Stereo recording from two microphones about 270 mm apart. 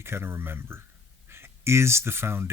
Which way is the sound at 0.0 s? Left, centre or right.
Centre.